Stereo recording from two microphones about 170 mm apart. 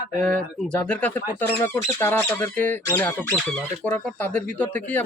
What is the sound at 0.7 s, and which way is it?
Speech, 10° left (ahead or behind).